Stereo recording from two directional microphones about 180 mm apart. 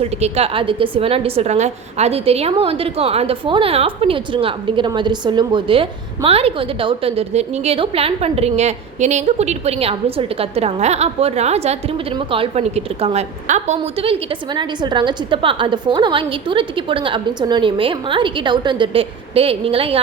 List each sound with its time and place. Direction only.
0.0 s a woman's voice: 35° right (ahead or behind)